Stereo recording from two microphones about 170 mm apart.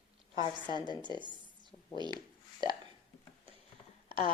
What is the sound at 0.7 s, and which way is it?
Speech, 25° left (ahead or behind).